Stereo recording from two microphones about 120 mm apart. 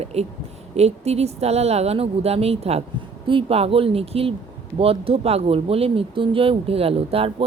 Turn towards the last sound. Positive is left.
turn(degrees=-55)  # may be behind; listen again after turning